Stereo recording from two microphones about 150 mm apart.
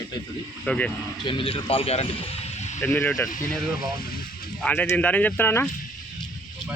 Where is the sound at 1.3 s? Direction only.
35° left (ahead or behind).